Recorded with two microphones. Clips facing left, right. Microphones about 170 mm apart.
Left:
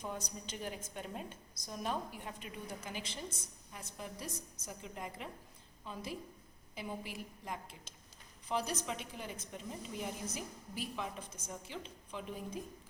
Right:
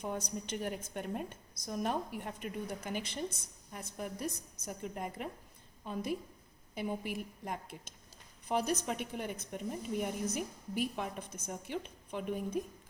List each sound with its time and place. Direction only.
0.0 s a woman's voice: 60° right (ahead or behind)